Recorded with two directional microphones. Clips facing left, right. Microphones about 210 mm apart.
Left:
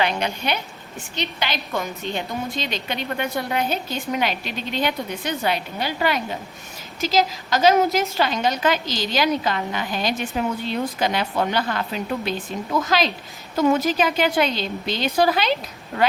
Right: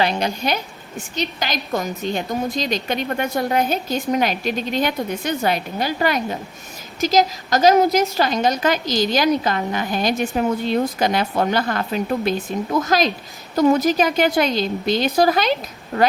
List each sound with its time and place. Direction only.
0.0 s a woman's voice: 35° right (ahead or behind)